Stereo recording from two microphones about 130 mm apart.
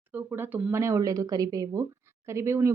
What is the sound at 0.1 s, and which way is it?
Speech, 15° right (ahead or behind).